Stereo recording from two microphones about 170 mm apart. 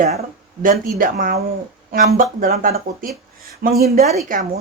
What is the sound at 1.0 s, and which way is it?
Speech, 55° right (ahead or behind).